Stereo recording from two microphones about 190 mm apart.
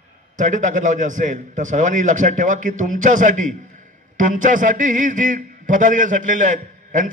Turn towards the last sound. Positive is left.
turn(degrees=-40)  # may be behind; listen again after turning